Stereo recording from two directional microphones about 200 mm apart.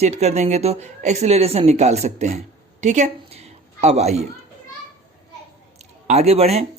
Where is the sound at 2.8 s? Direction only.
35° right (ahead or behind).